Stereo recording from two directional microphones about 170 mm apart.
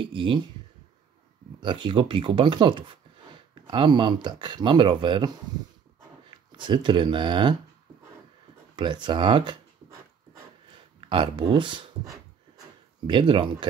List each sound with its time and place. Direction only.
0.0 s speech: 30° right (ahead or behind)
1.6 s speech: 30° right (ahead or behind)
8.7 s speech: 30° right (ahead or behind)
11.1 s speech: 30° right (ahead or behind)